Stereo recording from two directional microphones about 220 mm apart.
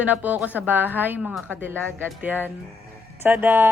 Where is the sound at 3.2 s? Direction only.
10° right (ahead or behind).